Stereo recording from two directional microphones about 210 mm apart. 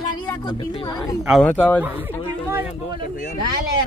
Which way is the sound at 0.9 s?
Centre (ahead or behind).